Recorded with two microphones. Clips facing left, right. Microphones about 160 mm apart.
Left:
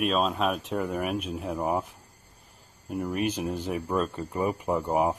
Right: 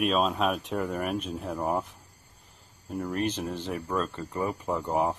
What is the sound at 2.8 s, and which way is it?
Speech, 5° left (ahead or behind).